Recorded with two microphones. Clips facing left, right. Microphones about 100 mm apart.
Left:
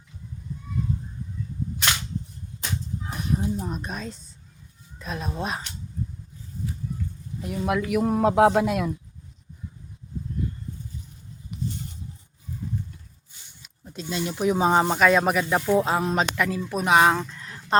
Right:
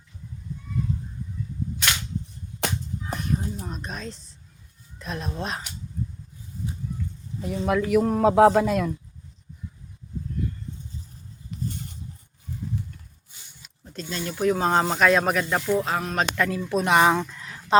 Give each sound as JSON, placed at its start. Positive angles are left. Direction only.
{"t": 3.2, "sound": "a man's voice", "side_deg": 10}
{"t": 7.4, "sound": "a man's voice", "side_deg": 5}
{"t": 11.6, "sound": "a sound", "side_deg": -45}
{"t": 13.8, "sound": "speech", "side_deg": 15}
{"t": 14.8, "sound": "a man's voice", "side_deg": 0}
{"t": 15.6, "sound": "a man's voice", "side_deg": 20}